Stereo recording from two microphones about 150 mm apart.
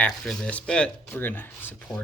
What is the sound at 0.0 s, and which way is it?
Speech, 5° left (ahead or behind).